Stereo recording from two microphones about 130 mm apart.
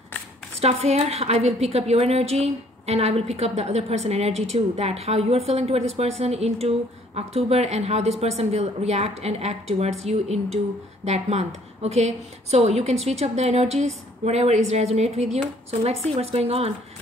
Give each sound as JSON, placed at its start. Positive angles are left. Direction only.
{"t": 0.6, "sound": "a woman's voice", "side_deg": -55}